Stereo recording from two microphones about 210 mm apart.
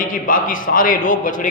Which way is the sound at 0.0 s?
40° left (ahead or behind).